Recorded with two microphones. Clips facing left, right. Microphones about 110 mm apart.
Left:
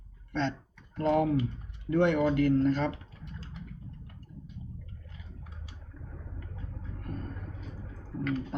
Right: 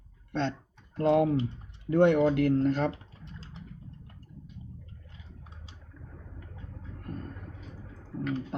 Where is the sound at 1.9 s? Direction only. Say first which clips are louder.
Right 3 dB; 55° right (ahead or behind).